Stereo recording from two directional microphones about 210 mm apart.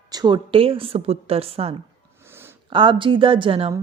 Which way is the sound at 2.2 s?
10° right (ahead or behind).